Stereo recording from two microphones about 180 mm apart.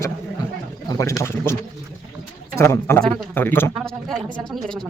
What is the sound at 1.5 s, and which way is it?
Speech, 15° left (ahead or behind).